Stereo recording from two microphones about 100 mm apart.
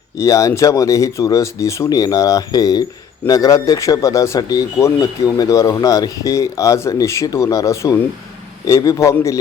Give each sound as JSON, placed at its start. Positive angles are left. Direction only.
{"t": 0.2, "sound": "speech", "side_deg": 35}